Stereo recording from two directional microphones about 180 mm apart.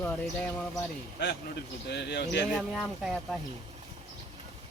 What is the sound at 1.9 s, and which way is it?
Speech, 70° left (ahead or behind).